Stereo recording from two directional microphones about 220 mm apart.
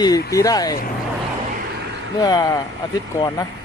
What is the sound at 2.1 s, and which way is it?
Speech, 15° left (ahead or behind).